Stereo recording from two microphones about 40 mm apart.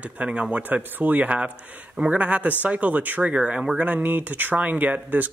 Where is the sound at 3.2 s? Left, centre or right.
Right.